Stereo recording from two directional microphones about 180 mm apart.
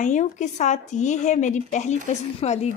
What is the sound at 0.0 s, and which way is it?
A woman's voice, 40° left (ahead or behind).